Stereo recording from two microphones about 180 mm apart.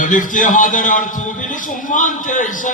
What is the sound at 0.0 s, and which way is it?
A man's voice, 45° left (ahead or behind).